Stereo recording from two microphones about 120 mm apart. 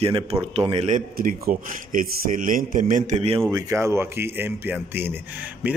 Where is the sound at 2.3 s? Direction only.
90° right.